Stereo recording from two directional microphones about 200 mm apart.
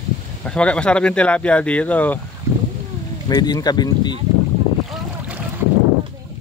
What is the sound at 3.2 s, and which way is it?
Speech, 20° left (ahead or behind).